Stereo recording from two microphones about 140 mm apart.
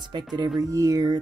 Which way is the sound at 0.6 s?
25° right (ahead or behind).